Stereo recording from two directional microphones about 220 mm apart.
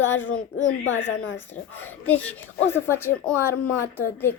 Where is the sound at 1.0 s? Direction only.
60° left (ahead or behind).